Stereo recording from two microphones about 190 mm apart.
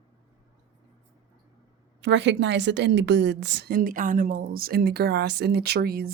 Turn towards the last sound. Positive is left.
turn(degrees=-55)  # may be behind; listen again after turning